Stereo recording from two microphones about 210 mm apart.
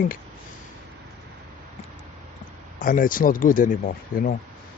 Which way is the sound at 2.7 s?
40° left (ahead or behind).